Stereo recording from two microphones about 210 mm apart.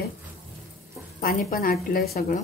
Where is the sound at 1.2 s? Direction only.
45° left (ahead or behind).